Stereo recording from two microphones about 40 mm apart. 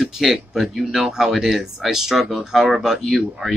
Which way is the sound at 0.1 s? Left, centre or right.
Centre.